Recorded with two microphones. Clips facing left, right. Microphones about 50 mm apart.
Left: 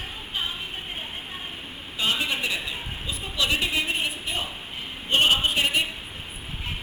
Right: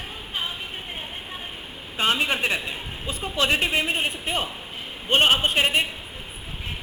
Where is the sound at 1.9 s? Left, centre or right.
Right.